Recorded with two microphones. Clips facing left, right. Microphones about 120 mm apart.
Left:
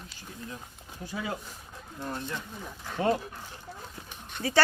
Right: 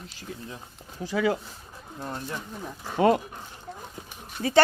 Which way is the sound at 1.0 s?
90° right.